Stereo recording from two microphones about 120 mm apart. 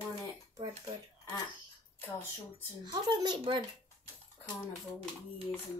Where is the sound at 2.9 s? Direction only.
35° right (ahead or behind).